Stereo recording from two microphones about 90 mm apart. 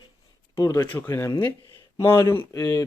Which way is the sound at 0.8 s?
20° left (ahead or behind).